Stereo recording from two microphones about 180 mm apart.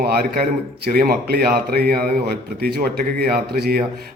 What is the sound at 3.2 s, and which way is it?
Speech, 60° right (ahead or behind).